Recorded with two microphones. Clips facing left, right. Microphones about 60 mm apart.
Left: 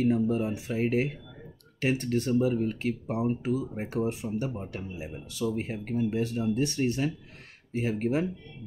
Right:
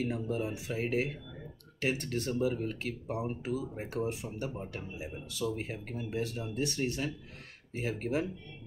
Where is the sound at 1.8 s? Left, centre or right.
Left.